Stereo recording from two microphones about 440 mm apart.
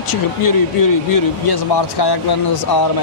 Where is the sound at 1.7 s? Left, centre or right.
Left.